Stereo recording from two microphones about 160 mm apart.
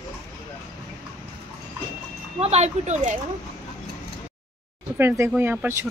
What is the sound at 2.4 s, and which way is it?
Speech, 40° right (ahead or behind).